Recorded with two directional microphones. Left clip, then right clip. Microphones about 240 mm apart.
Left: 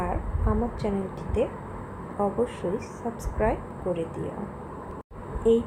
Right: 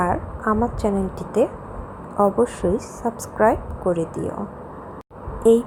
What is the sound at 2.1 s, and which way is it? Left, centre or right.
A woman's voice, right.